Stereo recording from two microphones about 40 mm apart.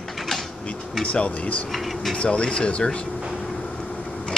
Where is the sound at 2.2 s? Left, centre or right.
Left.